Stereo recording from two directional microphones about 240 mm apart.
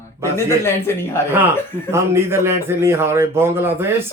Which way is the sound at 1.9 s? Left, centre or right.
Centre.